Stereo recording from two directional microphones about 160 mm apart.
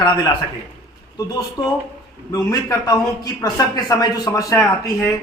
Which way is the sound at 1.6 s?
25° left (ahead or behind).